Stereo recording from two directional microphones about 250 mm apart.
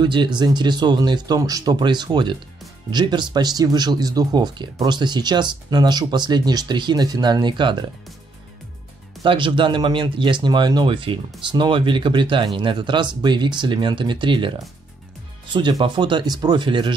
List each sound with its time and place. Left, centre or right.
0.0 s speech: centre
9.2 s speech: centre
15.5 s speech: centre